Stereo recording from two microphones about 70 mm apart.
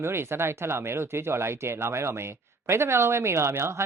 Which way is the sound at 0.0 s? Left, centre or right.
Right.